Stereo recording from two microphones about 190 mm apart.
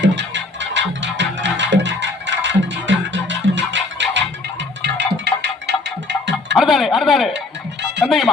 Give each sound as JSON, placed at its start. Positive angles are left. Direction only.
{"t": 0.0, "sound": "music", "side_deg": -70}
{"t": 6.6, "sound": "a sound", "side_deg": 0}
{"t": 7.3, "sound": "music", "side_deg": -65}
{"t": 8.0, "sound": "music", "side_deg": 0}